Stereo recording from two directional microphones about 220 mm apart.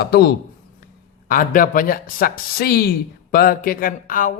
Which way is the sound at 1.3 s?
40° left (ahead or behind).